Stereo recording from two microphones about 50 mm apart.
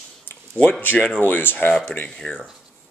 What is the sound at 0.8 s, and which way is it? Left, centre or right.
Speech, left.